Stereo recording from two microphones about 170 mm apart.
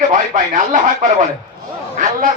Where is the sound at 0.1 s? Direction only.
50° right (ahead or behind).